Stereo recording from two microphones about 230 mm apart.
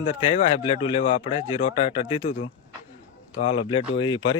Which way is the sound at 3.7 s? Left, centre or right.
Left.